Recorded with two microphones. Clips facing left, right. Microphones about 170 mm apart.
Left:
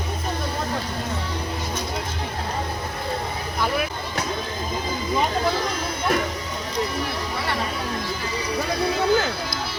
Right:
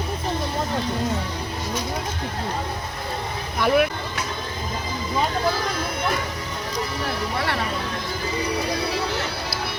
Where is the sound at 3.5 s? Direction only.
60° right (ahead or behind).